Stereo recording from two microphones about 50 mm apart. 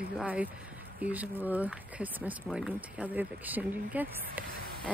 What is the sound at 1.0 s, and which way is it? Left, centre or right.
Speech, right.